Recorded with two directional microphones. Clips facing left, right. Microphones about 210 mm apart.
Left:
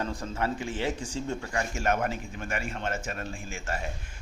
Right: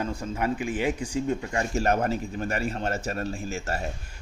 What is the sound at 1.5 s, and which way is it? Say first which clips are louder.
Speech: right 2 dB; 35° right (ahead or behind).